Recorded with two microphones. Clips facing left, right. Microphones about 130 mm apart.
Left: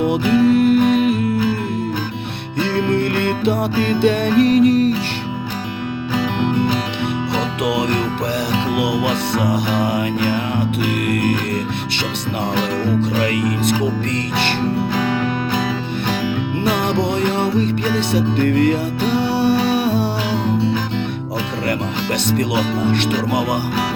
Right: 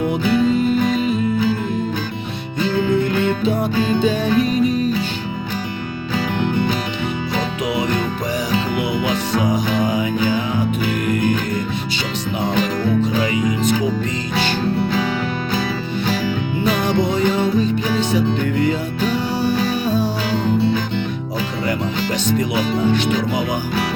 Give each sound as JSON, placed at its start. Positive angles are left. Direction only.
{"t": 0.1, "sound": "music", "side_deg": 70}
{"t": 2.6, "sound": "music", "side_deg": 70}
{"t": 9.0, "sound": "music", "side_deg": 70}
{"t": 13.0, "sound": "music", "side_deg": 65}
{"t": 16.8, "sound": "music", "side_deg": 60}
{"t": 22.8, "sound": "speech", "side_deg": 65}